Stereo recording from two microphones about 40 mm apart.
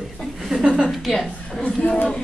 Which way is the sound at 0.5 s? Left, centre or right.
Right.